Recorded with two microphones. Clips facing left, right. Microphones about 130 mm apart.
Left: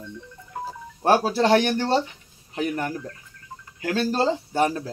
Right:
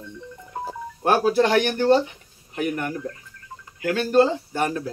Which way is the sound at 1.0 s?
30° left (ahead or behind).